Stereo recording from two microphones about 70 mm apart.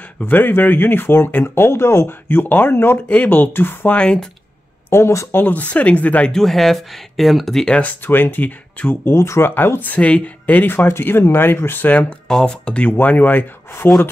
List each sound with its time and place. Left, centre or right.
0.2 s speech: left
3.9 s speech: centre
4.8 s speech: left
5.4 s speech: left
6.3 s speech: centre
7.7 s speech: left
9.1 s speech: left
9.5 s speech: left
12.9 s speech: left